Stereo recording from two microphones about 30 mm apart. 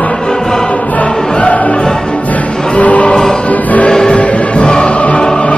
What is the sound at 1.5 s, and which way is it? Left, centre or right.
Music, left.